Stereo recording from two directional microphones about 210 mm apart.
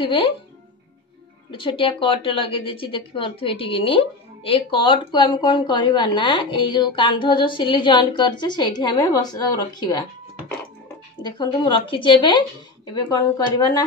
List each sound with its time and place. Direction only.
0.0 s a woman's voice: 25° left (ahead or behind)
1.5 s a woman's voice: 25° left (ahead or behind)
11.2 s a woman's voice: 20° left (ahead or behind)